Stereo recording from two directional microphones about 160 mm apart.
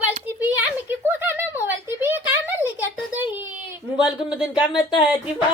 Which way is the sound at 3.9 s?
5° right (ahead or behind).